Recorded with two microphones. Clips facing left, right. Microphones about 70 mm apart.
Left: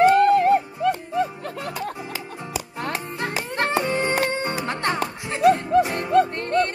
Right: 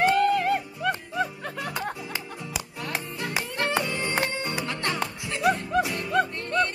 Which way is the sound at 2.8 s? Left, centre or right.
Left.